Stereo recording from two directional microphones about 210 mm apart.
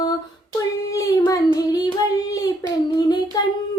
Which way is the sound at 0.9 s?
15° left (ahead or behind).